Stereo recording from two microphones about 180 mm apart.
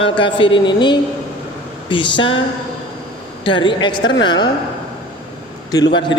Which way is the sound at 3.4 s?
25° left (ahead or behind).